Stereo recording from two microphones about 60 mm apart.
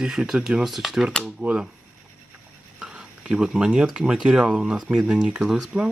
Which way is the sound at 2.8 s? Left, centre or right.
Centre.